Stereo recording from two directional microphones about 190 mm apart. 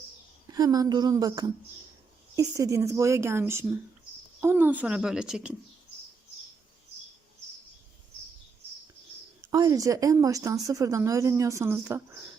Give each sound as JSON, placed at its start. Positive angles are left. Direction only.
{"t": 0.5, "sound": "speech", "side_deg": -20}
{"t": 9.5, "sound": "speech", "side_deg": -15}